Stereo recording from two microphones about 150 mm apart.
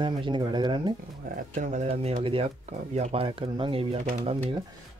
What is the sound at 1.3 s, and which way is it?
Speech, 65° right (ahead or behind).